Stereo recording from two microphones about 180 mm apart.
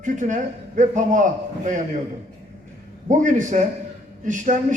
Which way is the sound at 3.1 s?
45° right (ahead or behind).